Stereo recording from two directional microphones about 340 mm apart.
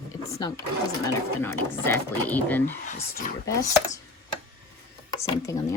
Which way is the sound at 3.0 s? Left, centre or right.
Left.